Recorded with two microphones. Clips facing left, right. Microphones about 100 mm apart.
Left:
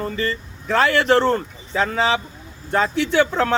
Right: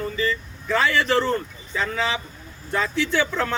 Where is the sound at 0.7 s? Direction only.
75° left (ahead or behind).